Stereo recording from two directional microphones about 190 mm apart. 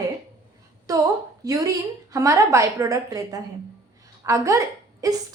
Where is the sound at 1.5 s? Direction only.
20° right (ahead or behind).